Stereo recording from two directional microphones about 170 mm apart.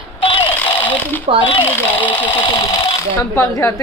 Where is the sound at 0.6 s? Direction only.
10° left (ahead or behind).